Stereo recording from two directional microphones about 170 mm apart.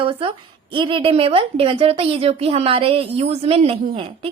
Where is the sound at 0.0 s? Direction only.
30° right (ahead or behind).